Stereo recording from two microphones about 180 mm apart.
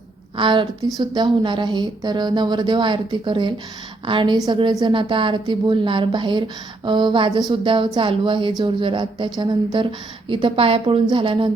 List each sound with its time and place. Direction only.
0.3 s speech: 25° right (ahead or behind)